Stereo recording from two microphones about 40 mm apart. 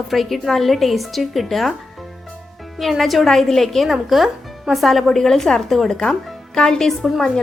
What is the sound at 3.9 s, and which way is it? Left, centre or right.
A woman's voice, centre.